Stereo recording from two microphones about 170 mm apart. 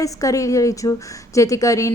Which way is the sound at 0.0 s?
20° left (ahead or behind).